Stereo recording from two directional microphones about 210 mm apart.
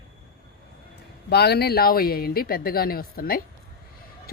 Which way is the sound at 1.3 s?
50° left (ahead or behind).